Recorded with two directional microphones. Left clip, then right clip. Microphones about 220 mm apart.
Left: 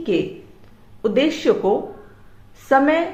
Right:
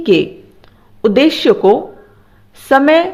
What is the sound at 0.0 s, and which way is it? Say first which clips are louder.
A woman's voice: right 9 dB; 45° right (ahead or behind).